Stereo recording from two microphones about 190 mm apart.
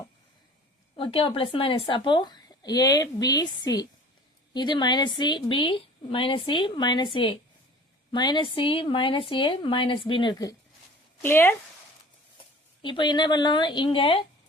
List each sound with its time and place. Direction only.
0.9 s speech: 30° left (ahead or behind); by 11.5 s 10° left (ahead or behind)
12.8 s speech: 25° left (ahead or behind)